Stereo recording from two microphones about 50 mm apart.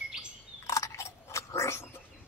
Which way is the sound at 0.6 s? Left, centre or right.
Left.